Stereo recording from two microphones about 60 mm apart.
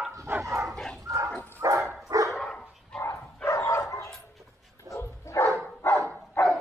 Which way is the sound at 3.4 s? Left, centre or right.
Left.